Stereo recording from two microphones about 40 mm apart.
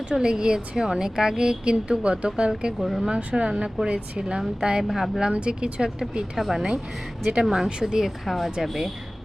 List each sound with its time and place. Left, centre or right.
0.1 s speech: right
2.7 s speech: centre
3.2 s speech: right
3.5 s speech: centre
4.9 s speech: centre
5.3 s speech: right
6.3 s speech: centre
8.2 s speech: centre